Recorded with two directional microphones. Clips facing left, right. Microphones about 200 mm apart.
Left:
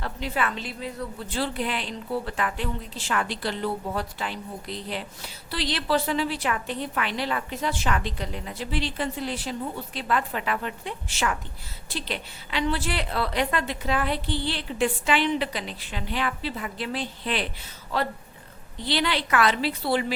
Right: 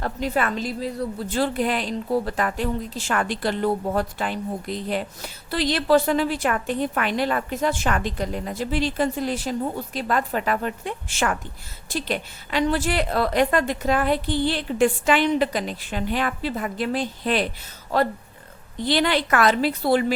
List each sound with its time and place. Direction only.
0.0 s a woman's voice: 45° right (ahead or behind)
18.8 s a woman's voice: 50° right (ahead or behind)